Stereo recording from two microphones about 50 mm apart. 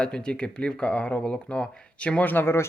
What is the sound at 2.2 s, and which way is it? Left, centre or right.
Speech, left.